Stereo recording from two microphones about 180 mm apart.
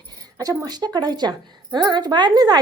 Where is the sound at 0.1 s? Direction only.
20° right (ahead or behind).